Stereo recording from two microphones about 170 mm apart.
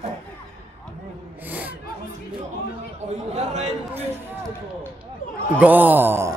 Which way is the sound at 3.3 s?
40° right (ahead or behind).